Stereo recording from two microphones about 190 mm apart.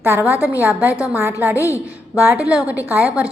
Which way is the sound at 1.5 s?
15° left (ahead or behind).